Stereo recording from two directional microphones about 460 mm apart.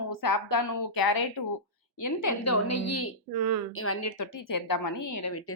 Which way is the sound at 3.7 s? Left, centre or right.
Left.